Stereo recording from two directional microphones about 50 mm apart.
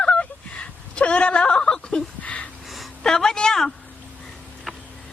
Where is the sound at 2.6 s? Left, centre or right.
Centre.